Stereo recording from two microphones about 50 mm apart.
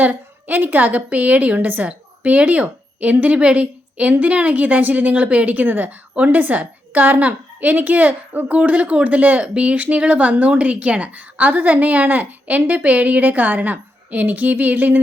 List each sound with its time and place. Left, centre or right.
0.0 s a woman's voice: right